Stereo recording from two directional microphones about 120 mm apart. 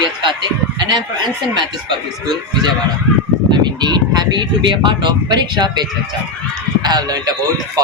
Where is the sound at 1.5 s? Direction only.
40° right (ahead or behind).